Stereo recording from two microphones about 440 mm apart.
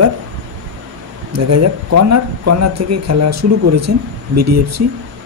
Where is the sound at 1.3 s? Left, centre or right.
Right.